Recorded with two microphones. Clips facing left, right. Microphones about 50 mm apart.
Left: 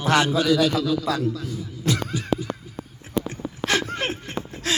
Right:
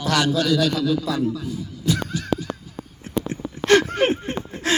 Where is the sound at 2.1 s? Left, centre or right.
Centre.